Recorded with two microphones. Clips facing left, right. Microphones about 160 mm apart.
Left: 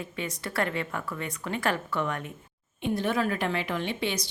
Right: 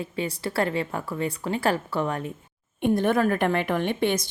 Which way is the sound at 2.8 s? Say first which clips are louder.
Right 6 dB; 50° right (ahead or behind).